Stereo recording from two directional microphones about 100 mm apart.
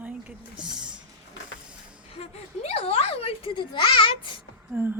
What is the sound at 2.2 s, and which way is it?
A child's voice, 90° left.